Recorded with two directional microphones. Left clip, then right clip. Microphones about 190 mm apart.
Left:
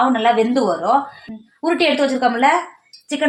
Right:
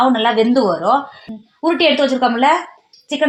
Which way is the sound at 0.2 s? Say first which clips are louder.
Right 2 dB; 45° right (ahead or behind).